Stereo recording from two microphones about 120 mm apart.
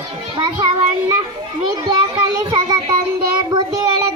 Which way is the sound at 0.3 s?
45° right (ahead or behind).